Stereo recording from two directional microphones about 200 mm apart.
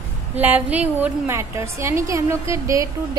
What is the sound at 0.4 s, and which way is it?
A woman's voice, 10° right (ahead or behind).